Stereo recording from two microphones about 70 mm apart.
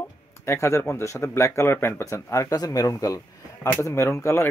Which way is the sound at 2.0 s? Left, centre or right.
Left.